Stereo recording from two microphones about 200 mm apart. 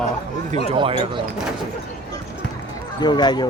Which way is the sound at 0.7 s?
25° right (ahead or behind).